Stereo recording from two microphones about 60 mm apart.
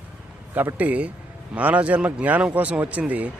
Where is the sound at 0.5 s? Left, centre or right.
Right.